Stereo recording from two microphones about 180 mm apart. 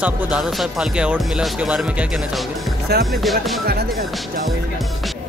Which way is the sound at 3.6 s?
60° right (ahead or behind).